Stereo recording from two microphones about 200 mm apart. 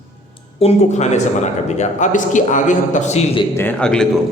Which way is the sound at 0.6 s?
30° left (ahead or behind).